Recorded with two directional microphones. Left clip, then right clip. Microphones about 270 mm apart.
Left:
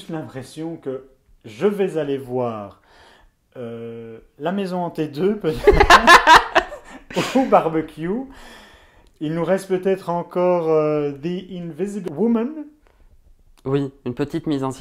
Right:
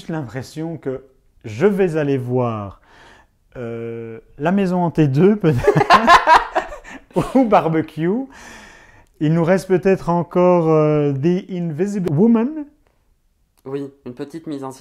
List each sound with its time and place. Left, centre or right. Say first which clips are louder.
0.1 s a man's voice: right 4 dB; right
3.5 s speech: right 4 dB; right
5.7 s a sound: left 1 dB; left
7.2 s speech: right 2 dB; right
12.1 s a man's voice: right 4 dB; right
13.6 s speech: left 5 dB; left